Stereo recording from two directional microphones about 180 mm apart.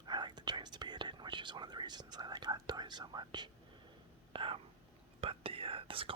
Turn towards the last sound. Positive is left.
turn(degrees=-30)  # may be behind; listen again after turning